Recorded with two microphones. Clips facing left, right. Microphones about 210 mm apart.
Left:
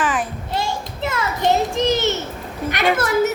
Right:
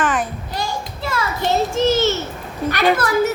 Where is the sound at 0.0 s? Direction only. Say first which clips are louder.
Right 2 dB; centre (ahead or behind).